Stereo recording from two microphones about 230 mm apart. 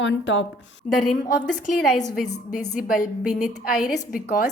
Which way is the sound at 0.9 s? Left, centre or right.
Left.